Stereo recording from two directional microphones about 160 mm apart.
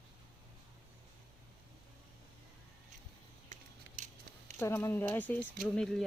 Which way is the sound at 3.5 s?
50° right (ahead or behind).